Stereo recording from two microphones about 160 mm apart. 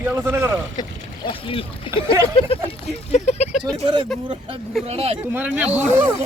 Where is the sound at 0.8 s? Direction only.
30° left (ahead or behind).